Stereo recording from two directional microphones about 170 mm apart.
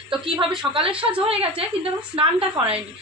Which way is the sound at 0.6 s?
10° right (ahead or behind).